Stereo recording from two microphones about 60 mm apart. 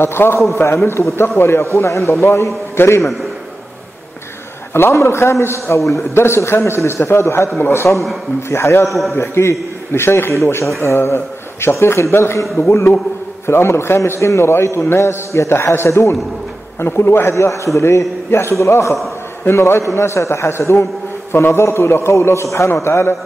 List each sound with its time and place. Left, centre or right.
0.0 s a man's voice: left
4.7 s a man's voice: left
8.8 s a man's voice: centre
9.1 s a man's voice: left